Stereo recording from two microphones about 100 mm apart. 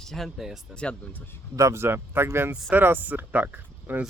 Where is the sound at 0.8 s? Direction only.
10° left (ahead or behind).